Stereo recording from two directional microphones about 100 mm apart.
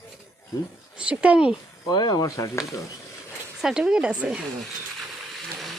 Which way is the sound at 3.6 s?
5° right (ahead or behind).